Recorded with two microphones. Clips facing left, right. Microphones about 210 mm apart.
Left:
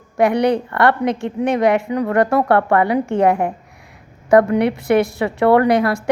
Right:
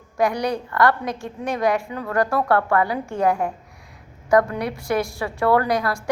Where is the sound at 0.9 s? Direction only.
20° left (ahead or behind).